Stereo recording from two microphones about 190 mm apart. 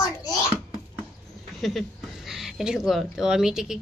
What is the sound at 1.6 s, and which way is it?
A woman's voice, centre (ahead or behind).